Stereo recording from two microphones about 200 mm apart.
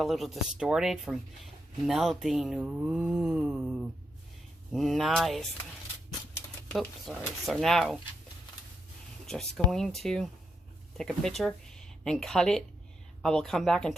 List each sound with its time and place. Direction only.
0.0 s speech: centre (ahead or behind)
6.7 s speech: centre (ahead or behind)
9.2 s speech: centre (ahead or behind)